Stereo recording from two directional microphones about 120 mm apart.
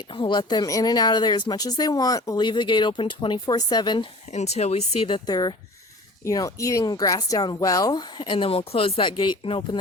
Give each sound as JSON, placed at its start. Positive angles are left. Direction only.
{"t": 0.1, "sound": "speech", "side_deg": 40}
{"t": 4.3, "sound": "speech", "side_deg": 65}
{"t": 5.0, "sound": "speech", "side_deg": 40}